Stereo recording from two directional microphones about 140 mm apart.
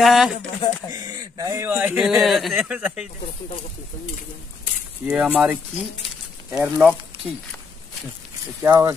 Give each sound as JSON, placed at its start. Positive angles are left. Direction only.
{"t": 0.0, "sound": "speech", "side_deg": 0}
{"t": 0.6, "sound": "speech", "side_deg": 35}
{"t": 0.9, "sound": "a man's voice", "side_deg": -25}
{"t": 5.0, "sound": "a man's voice", "side_deg": -10}
{"t": 6.6, "sound": "a man's voice", "side_deg": -10}
{"t": 8.6, "sound": "a man's voice", "side_deg": -15}